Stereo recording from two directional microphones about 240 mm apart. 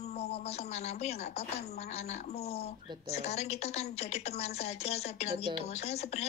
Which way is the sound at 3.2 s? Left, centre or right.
Left.